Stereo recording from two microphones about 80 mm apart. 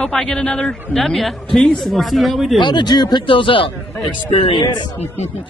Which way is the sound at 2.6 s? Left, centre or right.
Left.